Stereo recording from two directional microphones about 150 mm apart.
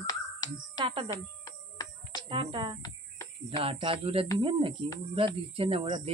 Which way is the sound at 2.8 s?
25° left (ahead or behind).